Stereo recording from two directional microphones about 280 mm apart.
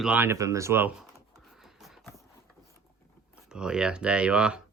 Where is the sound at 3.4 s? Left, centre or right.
Centre.